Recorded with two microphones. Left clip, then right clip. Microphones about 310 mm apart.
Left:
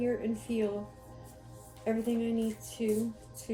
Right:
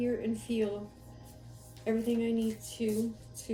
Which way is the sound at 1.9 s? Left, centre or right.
Left.